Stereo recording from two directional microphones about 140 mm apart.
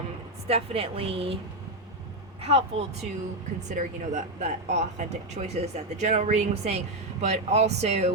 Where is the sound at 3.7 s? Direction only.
60° right (ahead or behind).